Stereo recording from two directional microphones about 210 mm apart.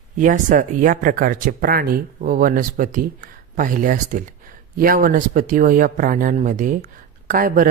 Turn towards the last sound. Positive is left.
turn(degrees=-40)  # may be behind; listen again after turning